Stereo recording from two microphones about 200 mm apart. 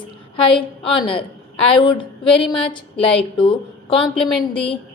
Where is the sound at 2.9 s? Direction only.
5° left (ahead or behind).